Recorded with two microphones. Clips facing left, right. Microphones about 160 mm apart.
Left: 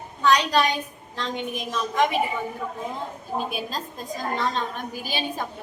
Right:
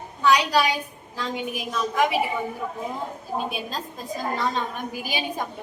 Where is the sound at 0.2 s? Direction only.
10° right (ahead or behind).